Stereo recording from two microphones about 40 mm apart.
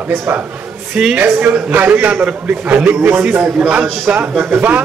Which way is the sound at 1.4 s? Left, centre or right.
Right.